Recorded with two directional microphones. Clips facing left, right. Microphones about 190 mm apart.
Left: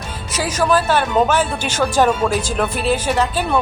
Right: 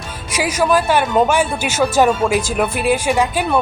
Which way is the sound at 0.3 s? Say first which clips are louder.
Right 1 dB; 10° right (ahead or behind).